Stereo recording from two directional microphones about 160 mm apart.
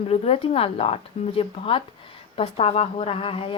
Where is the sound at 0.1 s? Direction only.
35° left (ahead or behind).